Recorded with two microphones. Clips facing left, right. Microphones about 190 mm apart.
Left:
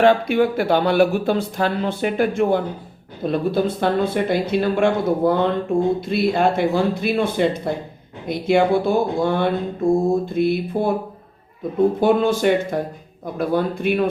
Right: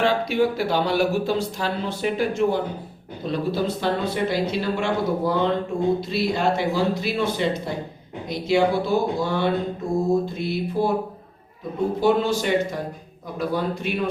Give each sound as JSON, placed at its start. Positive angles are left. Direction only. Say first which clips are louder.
{"t": 0.0, "sound": "speech", "louder": "left 5 dB", "side_deg": 55}
{"t": 11.9, "sound": "speech", "louder": "left 3 dB", "side_deg": 55}